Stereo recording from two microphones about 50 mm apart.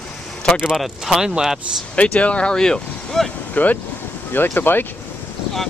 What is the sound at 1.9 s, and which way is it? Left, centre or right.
Speech, left.